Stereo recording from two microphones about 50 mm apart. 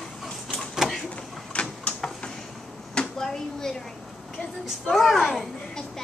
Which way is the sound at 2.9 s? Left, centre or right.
Centre.